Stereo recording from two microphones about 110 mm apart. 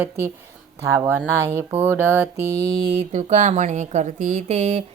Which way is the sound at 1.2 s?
20° right (ahead or behind).